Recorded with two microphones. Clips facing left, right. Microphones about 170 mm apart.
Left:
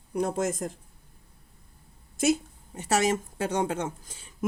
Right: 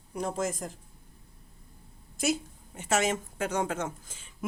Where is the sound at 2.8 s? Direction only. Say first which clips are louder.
Left 3 dB; 35° left (ahead or behind).